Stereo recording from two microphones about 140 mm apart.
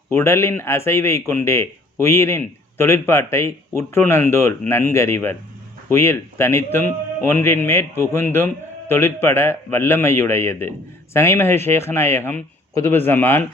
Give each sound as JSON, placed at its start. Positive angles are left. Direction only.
{"t": 0.1, "sound": "a man's voice", "side_deg": 20}